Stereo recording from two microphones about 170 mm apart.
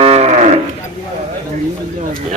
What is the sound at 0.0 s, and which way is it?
Cattle, 40° right (ahead or behind).